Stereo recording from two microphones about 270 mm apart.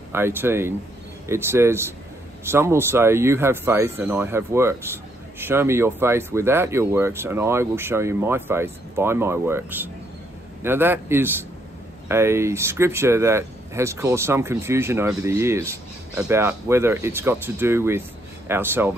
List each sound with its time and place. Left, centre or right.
0.1 s speech: centre